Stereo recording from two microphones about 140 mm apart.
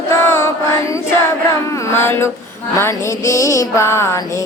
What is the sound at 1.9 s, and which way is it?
Mantra, 15° left (ahead or behind).